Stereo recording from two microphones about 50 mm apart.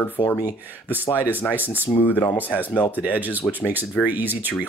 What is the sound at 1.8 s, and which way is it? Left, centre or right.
Speech, left.